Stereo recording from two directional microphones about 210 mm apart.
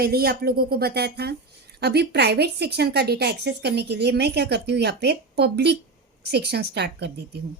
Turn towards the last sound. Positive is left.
turn(degrees=-55)  # may be behind; listen again after turning